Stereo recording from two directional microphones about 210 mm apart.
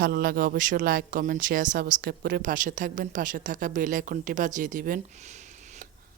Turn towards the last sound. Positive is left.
turn(degrees=-40)  # may be behind; listen again after turning